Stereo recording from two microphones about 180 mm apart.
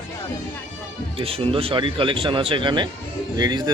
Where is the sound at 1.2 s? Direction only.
30° right (ahead or behind).